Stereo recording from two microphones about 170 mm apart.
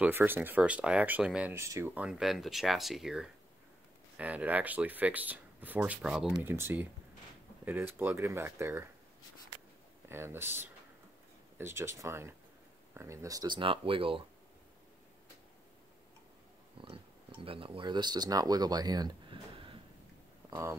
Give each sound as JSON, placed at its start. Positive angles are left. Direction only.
{"t": 0.0, "sound": "speech", "side_deg": -10}
{"t": 10.0, "sound": "speech", "side_deg": -15}
{"t": 16.8, "sound": "speech", "side_deg": -30}
{"t": 20.4, "sound": "a sound", "side_deg": -20}